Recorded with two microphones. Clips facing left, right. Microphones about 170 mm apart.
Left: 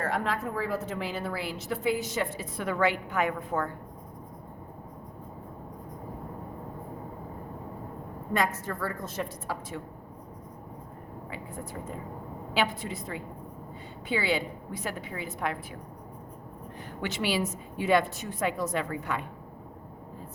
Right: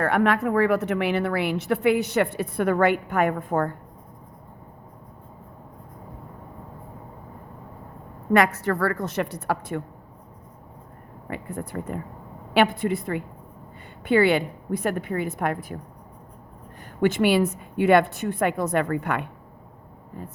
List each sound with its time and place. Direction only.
0.0 s a woman's voice: 70° right (ahead or behind); by 3.8 s 50° right (ahead or behind)
8.3 s a woman's voice: 75° right (ahead or behind)
11.3 s a woman's voice: 60° right (ahead or behind)
17.0 s a woman's voice: 50° right (ahead or behind)